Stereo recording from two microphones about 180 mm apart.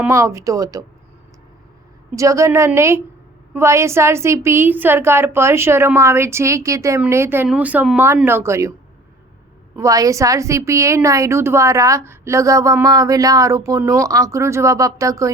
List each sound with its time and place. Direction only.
0.0 s speech: 15° right (ahead or behind)
2.1 s a woman's voice: 15° right (ahead or behind)
9.7 s a woman's voice: 20° right (ahead or behind)